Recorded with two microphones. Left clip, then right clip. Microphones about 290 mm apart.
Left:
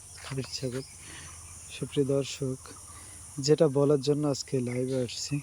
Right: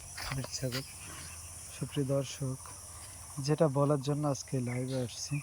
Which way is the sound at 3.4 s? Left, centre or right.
Centre.